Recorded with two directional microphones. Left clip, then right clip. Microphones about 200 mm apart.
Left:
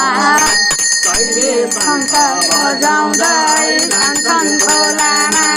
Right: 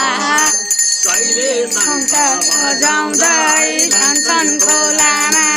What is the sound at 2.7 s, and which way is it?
Music, 20° right (ahead or behind).